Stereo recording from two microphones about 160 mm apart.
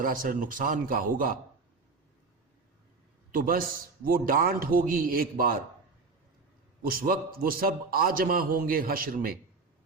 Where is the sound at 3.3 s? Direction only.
60° right (ahead or behind).